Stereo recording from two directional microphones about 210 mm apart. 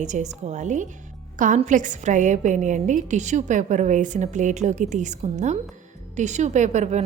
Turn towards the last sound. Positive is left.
turn(degrees=-35)  # may be behind; listen again after turning